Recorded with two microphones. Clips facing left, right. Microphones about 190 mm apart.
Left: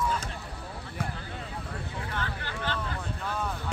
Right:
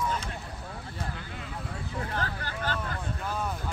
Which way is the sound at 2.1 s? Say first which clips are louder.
Right 1 dB; 45° right (ahead or behind).